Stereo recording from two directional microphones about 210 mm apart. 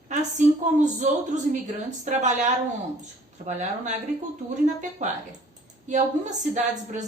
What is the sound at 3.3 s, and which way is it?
A woman's voice, 35° right (ahead or behind).